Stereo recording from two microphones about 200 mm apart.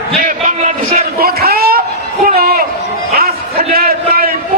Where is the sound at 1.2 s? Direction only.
50° right (ahead or behind).